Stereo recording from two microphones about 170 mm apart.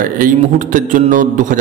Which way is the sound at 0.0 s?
50° right (ahead or behind).